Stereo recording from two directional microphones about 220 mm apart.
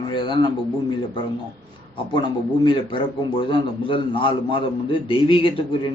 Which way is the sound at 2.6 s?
20° left (ahead or behind).